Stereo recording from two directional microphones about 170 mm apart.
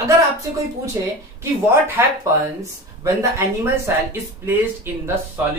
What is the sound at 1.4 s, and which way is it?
Speech, 15° right (ahead or behind).